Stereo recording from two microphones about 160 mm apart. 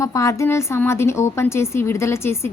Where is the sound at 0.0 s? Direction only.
20° left (ahead or behind).